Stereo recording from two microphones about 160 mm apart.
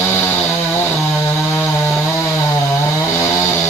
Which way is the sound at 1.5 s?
15° left (ahead or behind).